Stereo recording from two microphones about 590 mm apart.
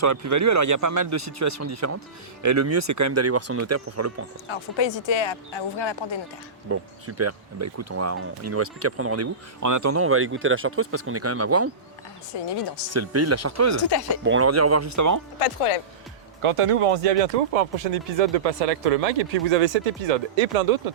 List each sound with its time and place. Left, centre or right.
0.0 s speech: right
4.4 s speech: left
6.7 s speech: right
12.9 s speech: right
15.4 s speech: left
16.4 s speech: right